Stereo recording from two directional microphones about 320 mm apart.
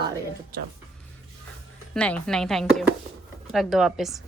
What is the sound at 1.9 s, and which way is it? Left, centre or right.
A woman's voice, centre.